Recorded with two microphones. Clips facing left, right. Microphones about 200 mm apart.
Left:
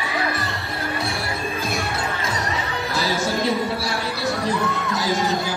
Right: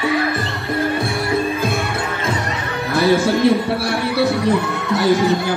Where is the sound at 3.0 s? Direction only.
60° right (ahead or behind).